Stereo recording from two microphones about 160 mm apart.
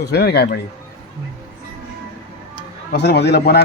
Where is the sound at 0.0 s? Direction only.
90° left.